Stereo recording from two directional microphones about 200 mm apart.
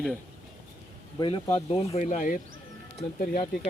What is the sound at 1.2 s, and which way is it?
Speech, 25° left (ahead or behind).